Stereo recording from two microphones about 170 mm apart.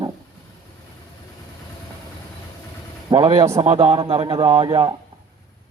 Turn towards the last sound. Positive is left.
turn(degrees=-30)  # may be behind; listen again after turning